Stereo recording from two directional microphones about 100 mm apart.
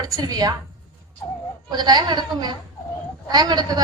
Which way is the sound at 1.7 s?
45° right (ahead or behind).